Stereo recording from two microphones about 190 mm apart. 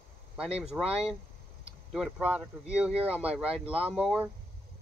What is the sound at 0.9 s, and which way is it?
Speech, 30° right (ahead or behind).